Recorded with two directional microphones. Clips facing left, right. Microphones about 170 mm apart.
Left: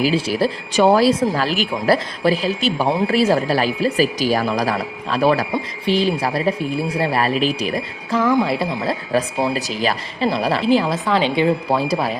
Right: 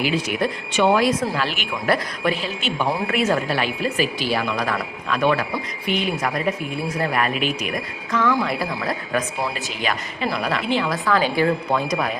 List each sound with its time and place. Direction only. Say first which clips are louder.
0.0 s speech: left 4 dB; 30° left (ahead or behind)
10.9 s speech: left 2 dB; 20° left (ahead or behind)